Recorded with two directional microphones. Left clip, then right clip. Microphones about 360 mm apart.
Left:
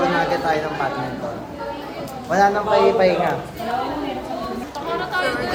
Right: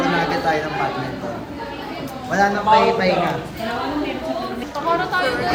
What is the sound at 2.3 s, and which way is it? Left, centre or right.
Speech, centre.